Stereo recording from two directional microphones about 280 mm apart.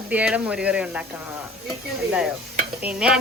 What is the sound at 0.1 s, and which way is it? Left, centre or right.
Speech, centre.